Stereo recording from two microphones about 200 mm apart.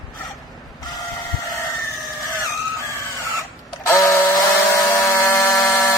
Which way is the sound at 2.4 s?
15° left (ahead or behind).